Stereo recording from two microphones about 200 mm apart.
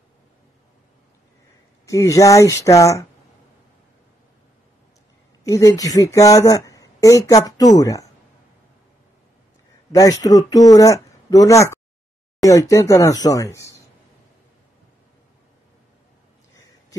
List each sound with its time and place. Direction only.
1.9 s speech: 15° left (ahead or behind)
5.4 s speech: 15° left (ahead or behind)
9.9 s speech: 20° left (ahead or behind)